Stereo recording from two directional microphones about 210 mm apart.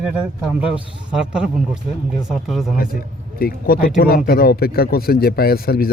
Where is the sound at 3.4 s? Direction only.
45° left (ahead or behind).